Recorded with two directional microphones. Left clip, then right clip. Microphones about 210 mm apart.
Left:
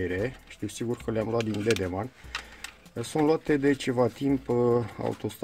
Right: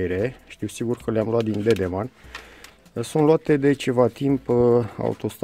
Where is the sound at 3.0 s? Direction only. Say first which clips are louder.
Right 6 dB; 40° right (ahead or behind).